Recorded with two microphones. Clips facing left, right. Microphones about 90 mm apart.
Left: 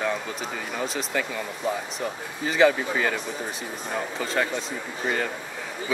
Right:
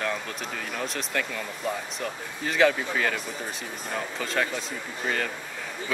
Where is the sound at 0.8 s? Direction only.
5° left (ahead or behind).